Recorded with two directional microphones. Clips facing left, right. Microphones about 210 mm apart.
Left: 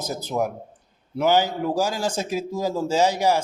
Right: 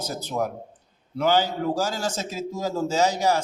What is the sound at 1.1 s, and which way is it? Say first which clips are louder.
A man's voice: left 2 dB; 10° left (ahead or behind).